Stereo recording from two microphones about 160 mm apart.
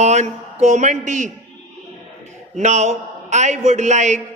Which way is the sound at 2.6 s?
45° right (ahead or behind).